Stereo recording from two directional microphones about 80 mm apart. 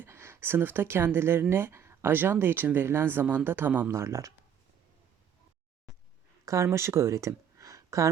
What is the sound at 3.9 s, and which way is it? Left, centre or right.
Speech, right.